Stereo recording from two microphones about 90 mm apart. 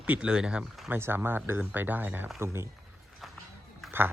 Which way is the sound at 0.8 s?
25° right (ahead or behind).